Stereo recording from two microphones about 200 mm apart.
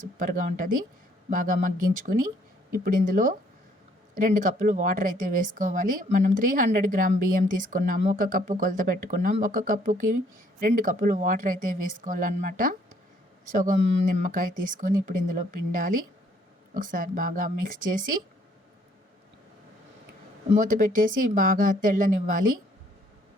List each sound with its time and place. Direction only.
0.2 s a woman's voice: 40° right (ahead or behind)
20.5 s a woman's voice: 40° right (ahead or behind)